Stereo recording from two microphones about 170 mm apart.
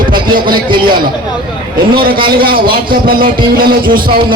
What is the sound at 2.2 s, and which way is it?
A man's voice, 60° right (ahead or behind).